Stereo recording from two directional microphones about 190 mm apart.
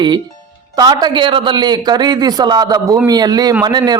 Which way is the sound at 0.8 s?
20° right (ahead or behind).